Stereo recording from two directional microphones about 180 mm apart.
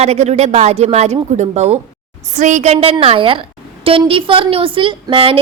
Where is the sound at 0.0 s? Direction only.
35° right (ahead or behind).